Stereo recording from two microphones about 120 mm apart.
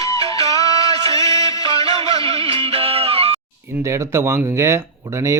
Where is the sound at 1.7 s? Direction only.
55° right (ahead or behind).